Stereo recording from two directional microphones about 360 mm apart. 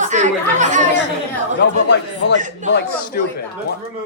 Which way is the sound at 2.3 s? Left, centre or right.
Right.